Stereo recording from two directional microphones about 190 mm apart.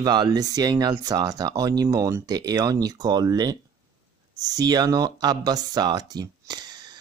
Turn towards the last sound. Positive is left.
turn(degrees=-20)  # may be behind; listen again after turning